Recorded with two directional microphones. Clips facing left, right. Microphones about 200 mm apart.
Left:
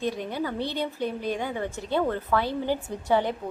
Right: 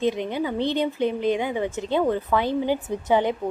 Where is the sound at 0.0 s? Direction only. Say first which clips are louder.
Right 5 dB; 20° right (ahead or behind).